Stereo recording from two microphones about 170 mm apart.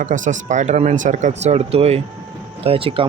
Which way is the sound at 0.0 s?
45° right (ahead or behind).